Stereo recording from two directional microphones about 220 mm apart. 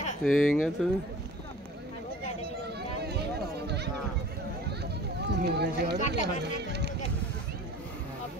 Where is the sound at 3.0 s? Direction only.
45° right (ahead or behind).